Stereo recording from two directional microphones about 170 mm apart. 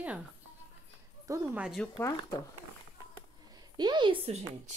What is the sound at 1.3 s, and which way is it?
Speech, 5° right (ahead or behind).